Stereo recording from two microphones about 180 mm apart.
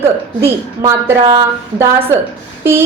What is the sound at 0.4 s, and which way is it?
A woman's voice, 15° right (ahead or behind).